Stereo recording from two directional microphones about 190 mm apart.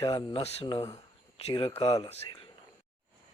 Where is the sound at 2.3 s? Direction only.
25° left (ahead or behind).